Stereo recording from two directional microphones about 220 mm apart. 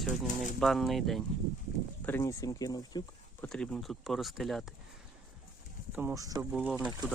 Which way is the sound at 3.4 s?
5° left (ahead or behind).